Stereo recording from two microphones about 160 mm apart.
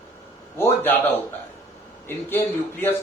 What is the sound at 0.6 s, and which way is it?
Speech, 15° left (ahead or behind).